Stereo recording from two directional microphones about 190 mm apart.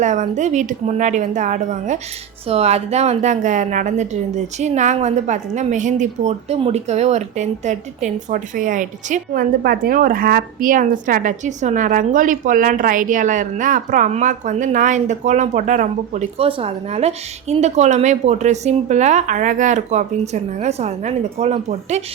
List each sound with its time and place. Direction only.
0.0 s a woman's voice: 40° right (ahead or behind)